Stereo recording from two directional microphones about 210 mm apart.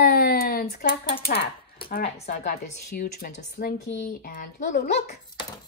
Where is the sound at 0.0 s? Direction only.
45° left (ahead or behind).